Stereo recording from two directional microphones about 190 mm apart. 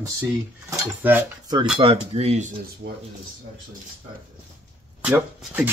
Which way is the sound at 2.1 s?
35° right (ahead or behind).